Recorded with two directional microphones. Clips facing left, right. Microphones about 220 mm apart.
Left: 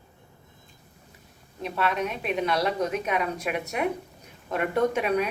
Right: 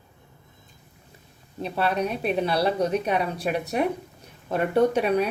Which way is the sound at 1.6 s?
35° right (ahead or behind).